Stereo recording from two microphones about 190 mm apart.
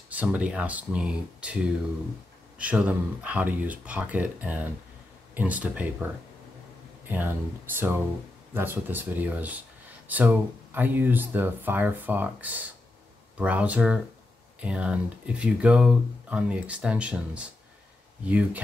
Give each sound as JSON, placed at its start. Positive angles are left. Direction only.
{"t": 0.1, "sound": "speech", "side_deg": -10}
{"t": 2.6, "sound": "speech", "side_deg": -5}
{"t": 7.1, "sound": "speech", "side_deg": -10}